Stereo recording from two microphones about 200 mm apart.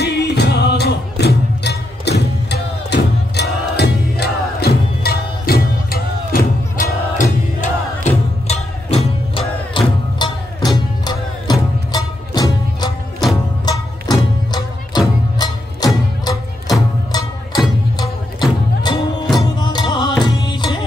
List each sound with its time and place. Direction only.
0.0 s music: 55° left (ahead or behind); by 15.9 s 20° left (ahead or behind)
17.9 s music: 20° left (ahead or behind)